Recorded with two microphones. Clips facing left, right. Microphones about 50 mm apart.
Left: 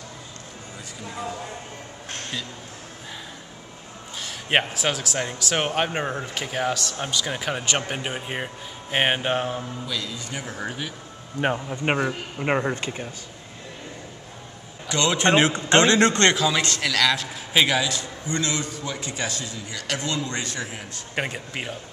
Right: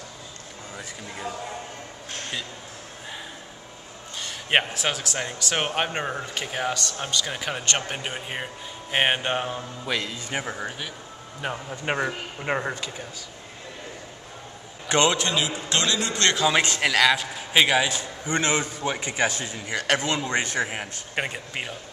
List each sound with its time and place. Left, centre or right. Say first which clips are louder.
4.2 s speech: even; centre
9.8 s a man's voice: right 6 dB; right
10.1 s a man's voice: right 3 dB; right
10.6 s speech: left 2 dB; centre
11.4 s a man's voice: left 7 dB; left
11.7 s a man's voice: left 4 dB; left
12.4 s speech: left 4 dB; centre
12.7 s a man's voice: left 4 dB; left
15.1 s a man's voice: left 7 dB; left
16.5 s a man's voice: right 2 dB; right
17.7 s a man's voice: right 1 dB; right
21.1 s speech: left 1 dB; centre